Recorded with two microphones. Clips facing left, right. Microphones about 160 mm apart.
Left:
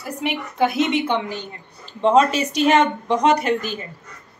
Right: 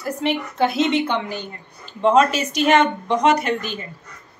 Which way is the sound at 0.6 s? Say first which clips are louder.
Even; 20° left (ahead or behind).